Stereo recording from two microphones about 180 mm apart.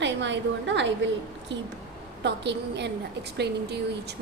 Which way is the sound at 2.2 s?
70° right (ahead or behind).